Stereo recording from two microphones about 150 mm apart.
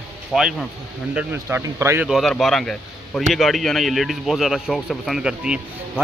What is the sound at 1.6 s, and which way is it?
Speech, 20° right (ahead or behind).